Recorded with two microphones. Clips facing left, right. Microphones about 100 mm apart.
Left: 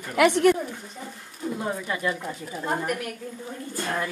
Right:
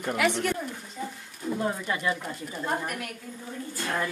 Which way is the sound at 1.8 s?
Centre (ahead or behind).